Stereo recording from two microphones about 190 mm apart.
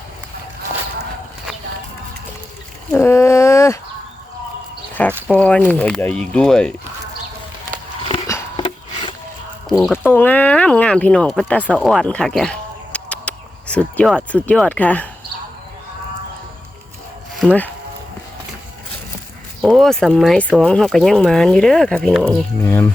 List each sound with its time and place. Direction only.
2.9 s speech: 10° left (ahead or behind)
5.3 s speech: 5° left (ahead or behind)
8.3 s wood: 25° left (ahead or behind)
9.6 s speech: centre (ahead or behind)
10.1 s speech: 10° left (ahead or behind)
17.4 s speech: 5° right (ahead or behind)
19.6 s speech: centre (ahead or behind)